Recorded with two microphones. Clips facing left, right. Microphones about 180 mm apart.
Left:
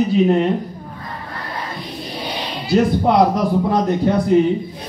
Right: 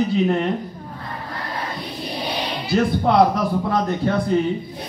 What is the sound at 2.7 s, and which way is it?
A man's voice, 15° left (ahead or behind).